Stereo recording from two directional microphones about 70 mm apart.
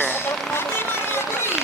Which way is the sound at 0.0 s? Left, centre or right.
Left.